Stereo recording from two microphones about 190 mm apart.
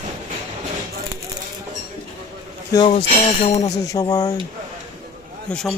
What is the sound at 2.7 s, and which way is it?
Speech, 25° left (ahead or behind).